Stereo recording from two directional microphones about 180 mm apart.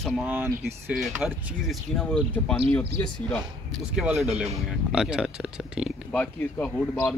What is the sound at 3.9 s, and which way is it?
Speech, centre (ahead or behind).